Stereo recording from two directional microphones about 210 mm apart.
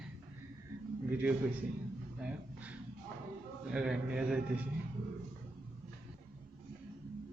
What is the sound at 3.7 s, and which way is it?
Speech, centre (ahead or behind).